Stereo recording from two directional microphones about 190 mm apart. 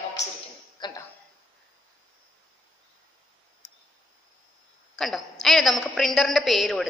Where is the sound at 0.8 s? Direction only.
20° left (ahead or behind).